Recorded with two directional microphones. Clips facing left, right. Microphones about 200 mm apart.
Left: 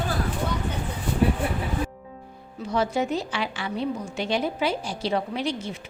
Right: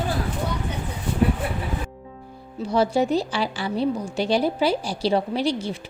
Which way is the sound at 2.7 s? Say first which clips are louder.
Right 4 dB; 35° right (ahead or behind).